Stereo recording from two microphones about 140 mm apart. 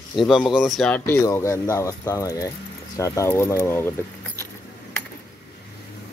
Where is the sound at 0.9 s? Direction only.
20° left (ahead or behind).